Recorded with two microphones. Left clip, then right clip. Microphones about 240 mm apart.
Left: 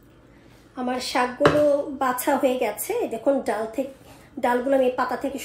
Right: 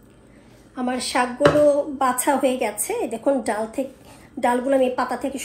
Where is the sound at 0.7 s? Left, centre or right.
Right.